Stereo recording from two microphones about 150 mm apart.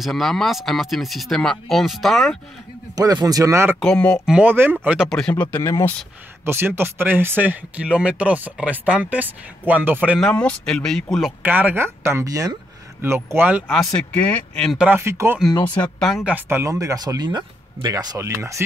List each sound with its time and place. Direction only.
0.0 s speech: centre (ahead or behind)
3.0 s speech: 25° right (ahead or behind)
3.8 s speech: 5° left (ahead or behind)
4.3 s speech: 10° right (ahead or behind)
5.3 s speech: 15° left (ahead or behind)
6.4 s speech: 15° right (ahead or behind)
10.1 s speech: 5° left (ahead or behind)
11.4 s speech: 10° right (ahead or behind); by 14.8 s 5° left (ahead or behind)
14.8 s speech: 15° right (ahead or behind)
16.0 s speech: centre (ahead or behind)
16.3 s speech: 15° right (ahead or behind)